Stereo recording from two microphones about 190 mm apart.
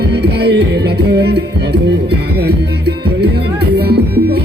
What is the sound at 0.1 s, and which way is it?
Music, 60° right (ahead or behind).